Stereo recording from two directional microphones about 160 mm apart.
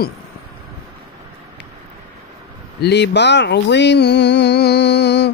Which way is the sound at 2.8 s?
90° left.